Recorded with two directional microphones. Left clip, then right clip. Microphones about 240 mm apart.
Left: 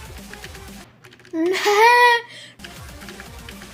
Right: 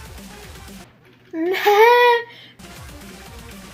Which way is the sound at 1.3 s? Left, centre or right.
Left.